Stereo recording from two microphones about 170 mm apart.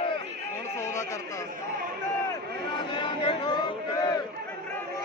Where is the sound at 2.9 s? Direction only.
30° left (ahead or behind).